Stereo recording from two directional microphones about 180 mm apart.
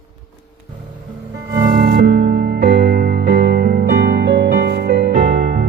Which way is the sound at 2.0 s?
55° right (ahead or behind).